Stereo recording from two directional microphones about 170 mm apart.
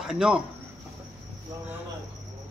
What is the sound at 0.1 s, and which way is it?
Speech, 5° right (ahead or behind).